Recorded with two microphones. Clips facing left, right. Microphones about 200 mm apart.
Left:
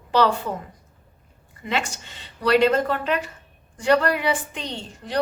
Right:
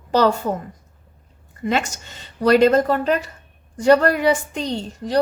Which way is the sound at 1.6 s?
40° right (ahead or behind).